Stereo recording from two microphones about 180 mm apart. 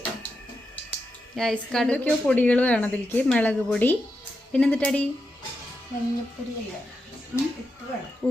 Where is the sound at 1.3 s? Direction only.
Centre (ahead or behind).